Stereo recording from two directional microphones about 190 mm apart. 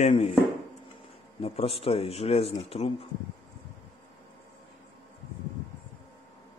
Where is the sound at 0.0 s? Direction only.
35° left (ahead or behind).